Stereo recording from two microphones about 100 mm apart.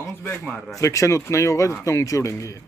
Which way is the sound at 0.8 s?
30° left (ahead or behind).